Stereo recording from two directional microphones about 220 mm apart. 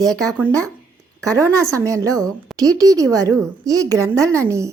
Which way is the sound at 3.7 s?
15° right (ahead or behind).